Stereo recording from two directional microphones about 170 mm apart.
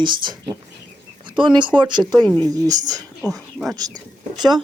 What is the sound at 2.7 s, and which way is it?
Speech, 20° right (ahead or behind).